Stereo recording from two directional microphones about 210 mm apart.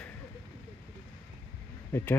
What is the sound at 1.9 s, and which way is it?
Speech, 10° left (ahead or behind).